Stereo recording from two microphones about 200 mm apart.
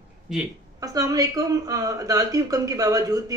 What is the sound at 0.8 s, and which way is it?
A woman's voice, 15° right (ahead or behind).